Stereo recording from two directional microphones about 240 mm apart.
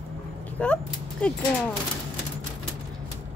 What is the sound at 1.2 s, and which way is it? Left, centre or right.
Speech, centre.